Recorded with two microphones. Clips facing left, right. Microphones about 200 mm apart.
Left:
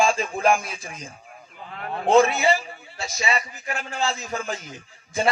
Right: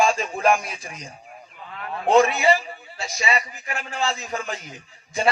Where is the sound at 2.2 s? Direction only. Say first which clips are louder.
Even; 25° left (ahead or behind).